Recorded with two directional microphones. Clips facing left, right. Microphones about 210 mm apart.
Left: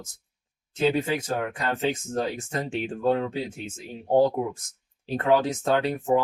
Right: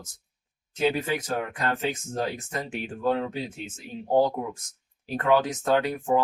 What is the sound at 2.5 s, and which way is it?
Speech, 25° left (ahead or behind).